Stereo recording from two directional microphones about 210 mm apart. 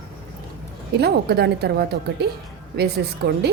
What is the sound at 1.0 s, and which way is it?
A woman's voice, 50° right (ahead or behind).